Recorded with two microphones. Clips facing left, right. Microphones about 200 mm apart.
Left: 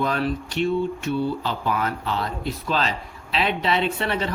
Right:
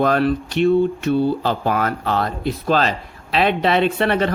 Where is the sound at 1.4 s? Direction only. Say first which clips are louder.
Right 5 dB; 45° right (ahead or behind).